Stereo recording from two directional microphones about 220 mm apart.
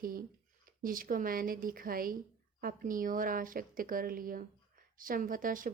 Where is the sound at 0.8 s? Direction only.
40° right (ahead or behind).